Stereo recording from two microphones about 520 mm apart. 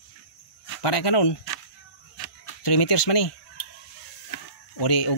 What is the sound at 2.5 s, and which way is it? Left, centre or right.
Music, left.